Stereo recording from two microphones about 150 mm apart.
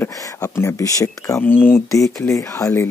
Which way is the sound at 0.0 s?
20° left (ahead or behind).